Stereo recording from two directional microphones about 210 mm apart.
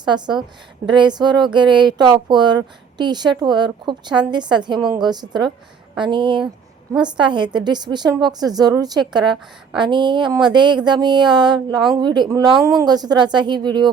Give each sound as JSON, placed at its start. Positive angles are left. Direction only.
{"t": 0.0, "sound": "a woman's voice", "side_deg": -20}